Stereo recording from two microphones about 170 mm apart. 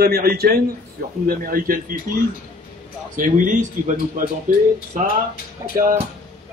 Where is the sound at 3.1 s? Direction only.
50° right (ahead or behind).